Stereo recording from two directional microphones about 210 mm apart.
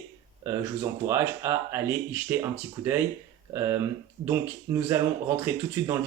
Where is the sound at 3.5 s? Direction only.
10° right (ahead or behind).